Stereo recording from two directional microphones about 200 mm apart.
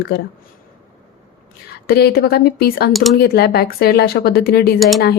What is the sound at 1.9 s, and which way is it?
Speech, 50° left (ahead or behind).